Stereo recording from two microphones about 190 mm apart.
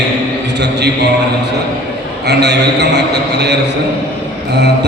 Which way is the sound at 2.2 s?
60° right (ahead or behind).